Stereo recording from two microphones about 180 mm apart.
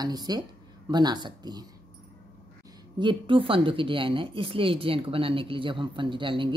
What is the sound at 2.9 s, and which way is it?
Speech, 25° right (ahead or behind).